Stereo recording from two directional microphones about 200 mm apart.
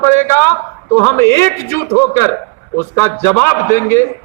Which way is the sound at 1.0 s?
15° left (ahead or behind).